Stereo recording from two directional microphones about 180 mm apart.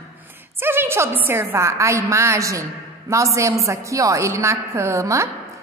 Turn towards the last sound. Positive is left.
turn(degrees=-15)  # may be behind; listen again after turning